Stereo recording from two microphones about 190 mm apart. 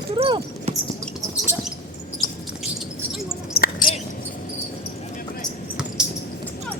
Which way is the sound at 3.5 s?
55° left (ahead or behind).